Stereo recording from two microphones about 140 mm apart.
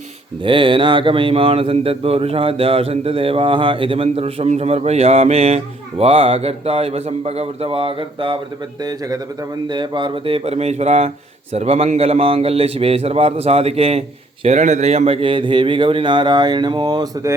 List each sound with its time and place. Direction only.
0.4 s speech: 35° right (ahead or behind)
8.8 s speech: 25° right (ahead or behind); by 14.0 s 45° right (ahead or behind)
14.4 s speech: 55° right (ahead or behind); by 17.3 s 30° right (ahead or behind)